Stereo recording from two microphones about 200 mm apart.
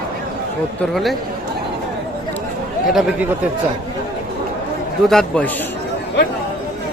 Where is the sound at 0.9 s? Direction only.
Centre (ahead or behind).